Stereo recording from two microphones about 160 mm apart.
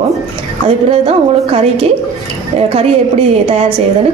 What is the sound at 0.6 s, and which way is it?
A woman's voice, 35° right (ahead or behind).